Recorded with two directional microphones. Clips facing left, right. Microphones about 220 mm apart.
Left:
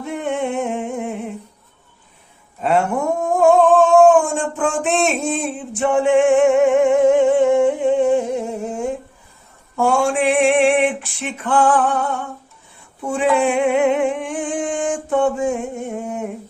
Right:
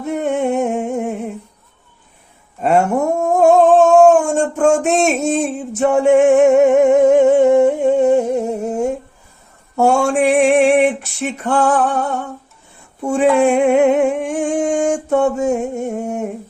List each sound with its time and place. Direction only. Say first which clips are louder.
0.0 s music: right 4 dB; 45° right (ahead or behind)
2.6 s humming: right 4 dB; 45° right (ahead or behind)
4.1 s a sound: right 2 dB; 45° right (ahead or behind)
4.8 s music: right 3 dB; 45° right (ahead or behind)
9.7 s female singing: right 3 dB; 45° right (ahead or behind)
15.1 s a sound: right 1 dB; 45° right (ahead or behind)